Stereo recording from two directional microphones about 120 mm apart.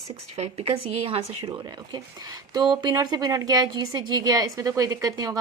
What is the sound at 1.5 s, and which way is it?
A woman's voice, 35° right (ahead or behind).